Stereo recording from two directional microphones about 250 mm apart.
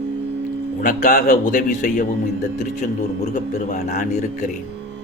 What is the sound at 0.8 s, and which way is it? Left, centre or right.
A man's voice, left.